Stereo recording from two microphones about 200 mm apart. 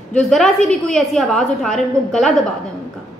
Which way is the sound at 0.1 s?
5° left (ahead or behind).